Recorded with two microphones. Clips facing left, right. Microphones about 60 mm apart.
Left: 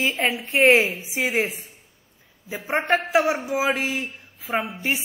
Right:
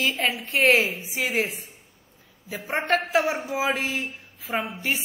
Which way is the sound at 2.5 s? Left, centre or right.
Left.